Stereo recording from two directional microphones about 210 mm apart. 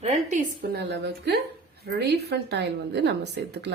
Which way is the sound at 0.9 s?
55° right (ahead or behind).